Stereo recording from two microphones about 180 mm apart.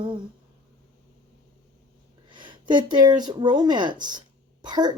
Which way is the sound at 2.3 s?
25° right (ahead or behind).